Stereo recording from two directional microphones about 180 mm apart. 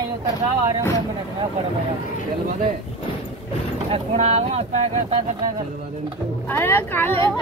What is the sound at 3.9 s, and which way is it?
Speech, 35° right (ahead or behind).